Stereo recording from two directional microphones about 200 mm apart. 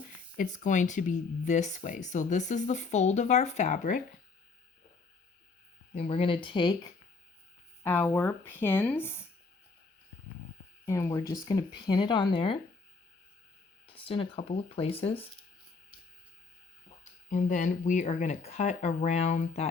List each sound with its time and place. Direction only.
0.0 s speech: 40° left (ahead or behind)
5.9 s speech: 30° left (ahead or behind)
7.9 s speech: 15° left (ahead or behind)
10.8 s speech: 15° left (ahead or behind)
13.8 s speech: 25° left (ahead or behind)
17.2 s speech: 40° left (ahead or behind)